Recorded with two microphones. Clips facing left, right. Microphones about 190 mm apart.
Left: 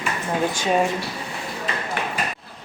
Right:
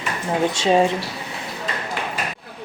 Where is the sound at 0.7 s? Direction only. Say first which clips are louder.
Right 4 dB; 25° right (ahead or behind).